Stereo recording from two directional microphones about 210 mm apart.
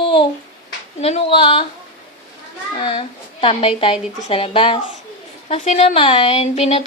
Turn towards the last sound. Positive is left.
turn(degrees=30)  # may be behind; listen again after turning